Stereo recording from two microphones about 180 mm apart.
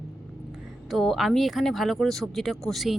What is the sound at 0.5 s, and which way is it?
Speech, centre (ahead or behind).